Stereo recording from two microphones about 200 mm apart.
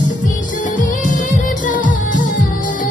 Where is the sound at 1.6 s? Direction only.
40° left (ahead or behind).